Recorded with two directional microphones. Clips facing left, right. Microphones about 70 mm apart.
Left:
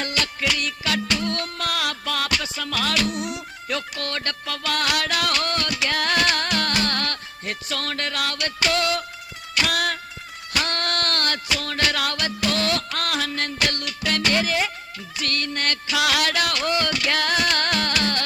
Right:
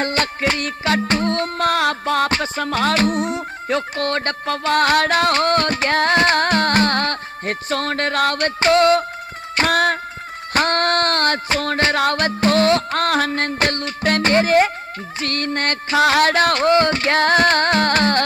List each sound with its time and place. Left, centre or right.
0.0 s music: right